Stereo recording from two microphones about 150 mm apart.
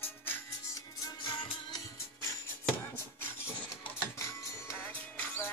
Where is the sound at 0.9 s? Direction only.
25° left (ahead or behind).